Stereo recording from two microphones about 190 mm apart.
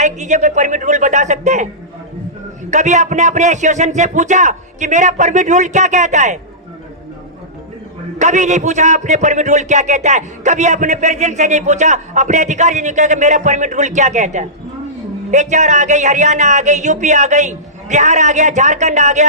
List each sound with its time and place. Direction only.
0.0 s speech: 40° right (ahead or behind)
2.6 s speech: 40° right (ahead or behind)
8.2 s speech: 40° right (ahead or behind)